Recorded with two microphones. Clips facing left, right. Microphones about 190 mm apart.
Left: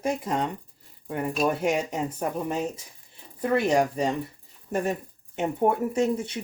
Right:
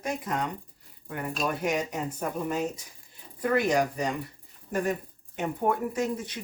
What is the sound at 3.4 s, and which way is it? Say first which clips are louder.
Speech: left 2 dB; 30° left (ahead or behind).